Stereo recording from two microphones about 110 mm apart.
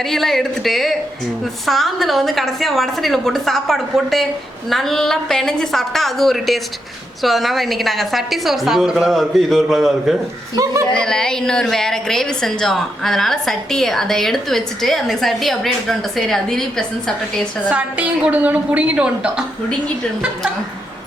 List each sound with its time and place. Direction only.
0.1 s a woman's voice: centre (ahead or behind)
10.5 s speech: 30° right (ahead or behind)
11.0 s a woman's voice: 5° left (ahead or behind)
17.7 s a woman's voice: 10° right (ahead or behind)